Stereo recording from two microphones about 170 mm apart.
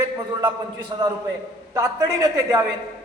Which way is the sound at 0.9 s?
25° right (ahead or behind).